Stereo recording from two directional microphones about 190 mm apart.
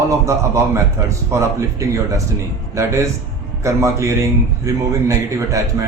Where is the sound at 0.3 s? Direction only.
15° right (ahead or behind).